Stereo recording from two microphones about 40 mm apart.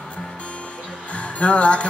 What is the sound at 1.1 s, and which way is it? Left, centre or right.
Music, left.